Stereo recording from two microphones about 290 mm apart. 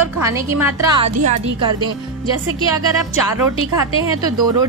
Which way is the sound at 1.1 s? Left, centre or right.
Right.